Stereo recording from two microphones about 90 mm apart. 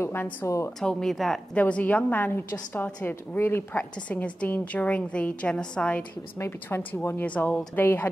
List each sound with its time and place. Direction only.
0.0 s a woman's voice: 25° left (ahead or behind)
0.7 s a woman's voice: 5° left (ahead or behind)
1.6 s a woman's voice: 15° left (ahead or behind)
6.3 s a woman's voice: 25° left (ahead or behind)